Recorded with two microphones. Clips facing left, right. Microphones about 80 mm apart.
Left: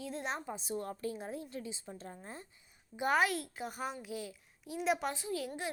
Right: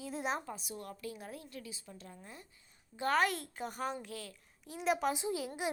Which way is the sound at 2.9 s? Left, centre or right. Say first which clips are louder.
Left 1 dB; centre.